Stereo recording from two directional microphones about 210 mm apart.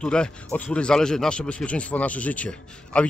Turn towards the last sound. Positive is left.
turn(degrees=5)  # may be behind; listen again after turning